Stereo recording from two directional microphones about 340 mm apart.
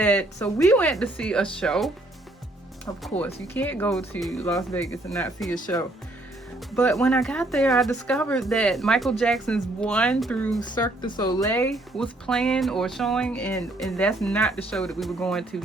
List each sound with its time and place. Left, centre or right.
0.0 s speech: centre
3.0 s speech: centre
6.7 s speech: centre